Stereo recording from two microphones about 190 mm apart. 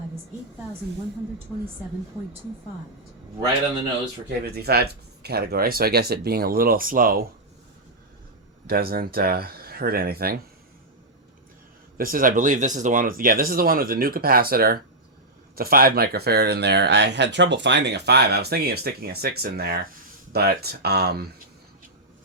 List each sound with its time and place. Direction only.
4.3 s speech: 55° right (ahead or behind)
8.6 s speech: 50° right (ahead or behind)
11.9 s speech: 50° right (ahead or behind)